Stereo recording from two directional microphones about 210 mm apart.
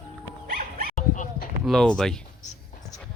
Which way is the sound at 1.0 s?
40° left (ahead or behind).